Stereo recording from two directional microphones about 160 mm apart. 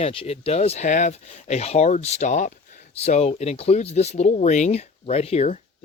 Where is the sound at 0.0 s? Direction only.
35° left (ahead or behind).